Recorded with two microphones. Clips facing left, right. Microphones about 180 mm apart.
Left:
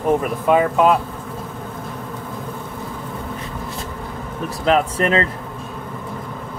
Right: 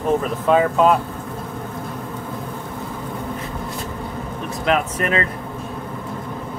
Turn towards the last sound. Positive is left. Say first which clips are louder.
# left 3 dB
turn(degrees=30)  # may be behind; listen again after turning